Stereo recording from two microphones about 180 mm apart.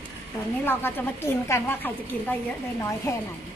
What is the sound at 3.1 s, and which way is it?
Speech, 15° left (ahead or behind).